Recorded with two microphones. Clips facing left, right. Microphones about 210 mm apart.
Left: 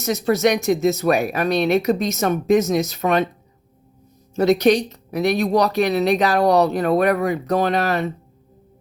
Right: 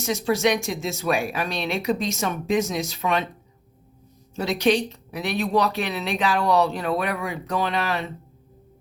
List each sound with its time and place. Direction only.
0.0 s speech: 40° left (ahead or behind)
4.4 s speech: 45° left (ahead or behind)